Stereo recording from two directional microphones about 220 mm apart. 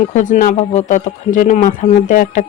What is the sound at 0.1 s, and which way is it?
Speech, 35° left (ahead or behind).